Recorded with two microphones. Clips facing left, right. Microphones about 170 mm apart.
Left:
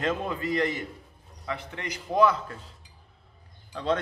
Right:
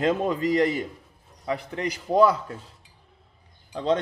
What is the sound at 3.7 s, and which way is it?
Speech, 20° right (ahead or behind).